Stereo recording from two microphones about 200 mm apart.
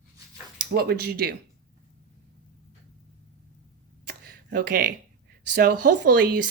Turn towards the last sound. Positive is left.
turn(degrees=-45)  # may be behind; listen again after turning